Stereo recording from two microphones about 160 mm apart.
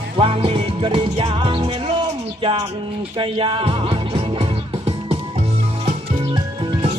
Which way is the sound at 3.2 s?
35° right (ahead or behind).